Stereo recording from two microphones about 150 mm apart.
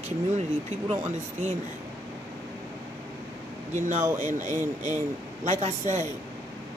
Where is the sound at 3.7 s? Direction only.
55° right (ahead or behind).